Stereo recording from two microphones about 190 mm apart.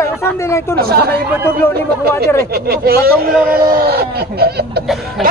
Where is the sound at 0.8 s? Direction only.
55° right (ahead or behind).